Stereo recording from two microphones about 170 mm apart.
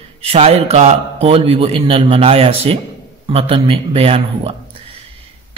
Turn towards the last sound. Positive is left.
turn(degrees=-35)  # may be behind; listen again after turning